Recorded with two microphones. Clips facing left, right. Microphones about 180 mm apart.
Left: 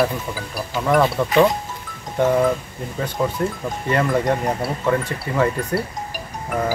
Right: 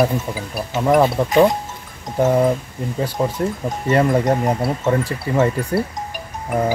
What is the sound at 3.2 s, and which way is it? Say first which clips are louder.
Speech: even; 30° right (ahead or behind).